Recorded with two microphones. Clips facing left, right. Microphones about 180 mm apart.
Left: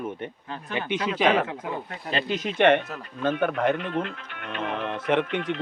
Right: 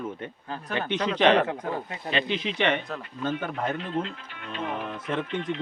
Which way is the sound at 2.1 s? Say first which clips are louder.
Even; 40° left (ahead or behind).